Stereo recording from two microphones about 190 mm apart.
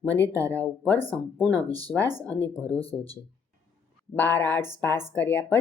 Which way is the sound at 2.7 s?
30° left (ahead or behind).